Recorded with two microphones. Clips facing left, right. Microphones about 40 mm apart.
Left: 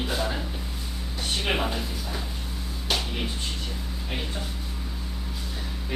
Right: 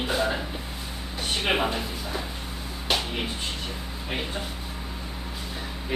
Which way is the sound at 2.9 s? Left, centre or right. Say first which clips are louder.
Right 2 dB; centre.